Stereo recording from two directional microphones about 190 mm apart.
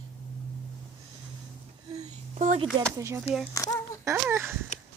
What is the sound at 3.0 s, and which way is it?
Speech, 15° right (ahead or behind).